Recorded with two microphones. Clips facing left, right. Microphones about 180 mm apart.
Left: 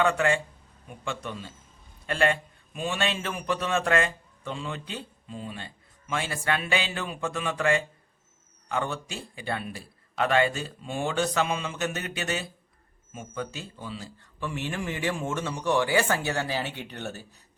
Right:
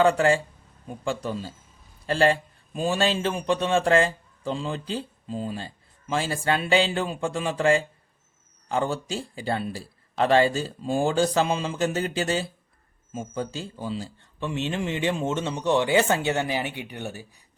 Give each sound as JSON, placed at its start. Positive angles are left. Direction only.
{"t": 0.0, "sound": "a man's voice", "side_deg": -35}